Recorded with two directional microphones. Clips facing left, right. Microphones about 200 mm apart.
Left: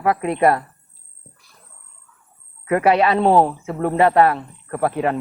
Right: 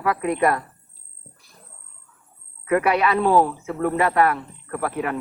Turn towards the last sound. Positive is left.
turn(degrees=30)  # may be behind; listen again after turning